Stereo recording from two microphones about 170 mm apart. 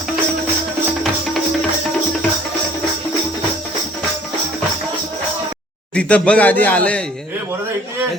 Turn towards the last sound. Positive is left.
turn(degrees=10)  # may be behind; listen again after turning